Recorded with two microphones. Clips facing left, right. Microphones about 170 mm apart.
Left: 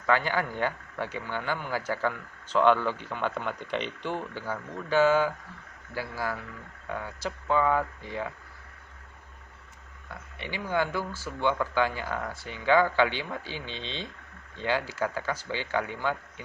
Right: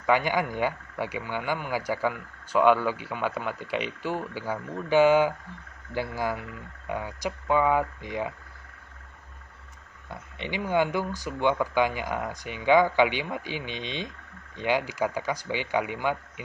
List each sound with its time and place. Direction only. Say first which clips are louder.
0.0 s a man's voice: right 2 dB; 15° right (ahead or behind)
10.3 s a man's voice: right 4 dB; 20° right (ahead or behind)